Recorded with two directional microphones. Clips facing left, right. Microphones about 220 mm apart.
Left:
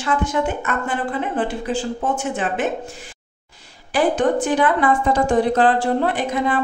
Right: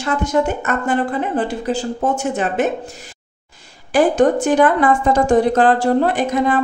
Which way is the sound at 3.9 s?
45° right (ahead or behind).